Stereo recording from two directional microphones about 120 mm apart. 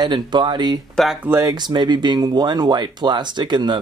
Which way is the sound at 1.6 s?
40° right (ahead or behind).